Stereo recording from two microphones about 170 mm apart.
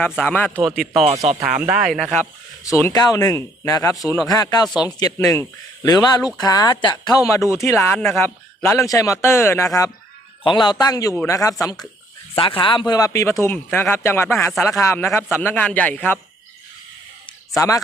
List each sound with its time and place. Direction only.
0.0 s speech: 10° left (ahead or behind)
2.7 s speech: 20° left (ahead or behind)
10.4 s speech: 25° left (ahead or behind); by 16.1 s 10° left (ahead or behind)
17.2 s a sound: 20° left (ahead or behind)